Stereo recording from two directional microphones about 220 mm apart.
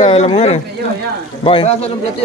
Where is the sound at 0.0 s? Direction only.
25° left (ahead or behind).